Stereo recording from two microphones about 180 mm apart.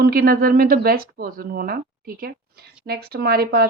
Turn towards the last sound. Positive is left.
turn(degrees=-60)  # may be behind; listen again after turning